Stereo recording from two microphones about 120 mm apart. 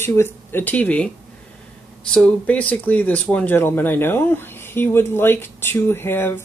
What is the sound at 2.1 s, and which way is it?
Speech, 10° left (ahead or behind).